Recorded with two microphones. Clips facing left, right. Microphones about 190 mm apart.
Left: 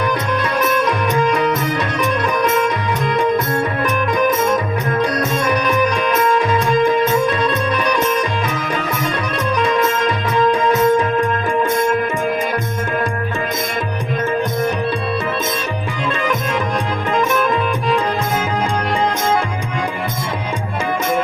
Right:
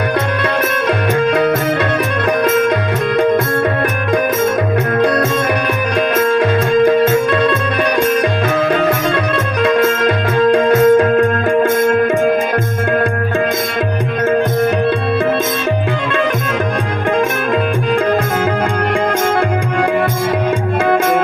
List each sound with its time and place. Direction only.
0.4 s music: 60° right (ahead or behind)
5.0 s music: 60° right (ahead or behind)